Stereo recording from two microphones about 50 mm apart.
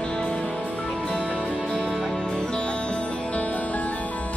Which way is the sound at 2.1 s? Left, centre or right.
Centre.